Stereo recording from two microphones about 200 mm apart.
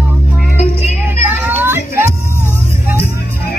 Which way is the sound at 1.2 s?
10° right (ahead or behind).